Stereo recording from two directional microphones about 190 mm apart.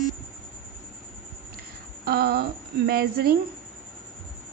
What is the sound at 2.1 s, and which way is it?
A woman's voice, 55° right (ahead or behind).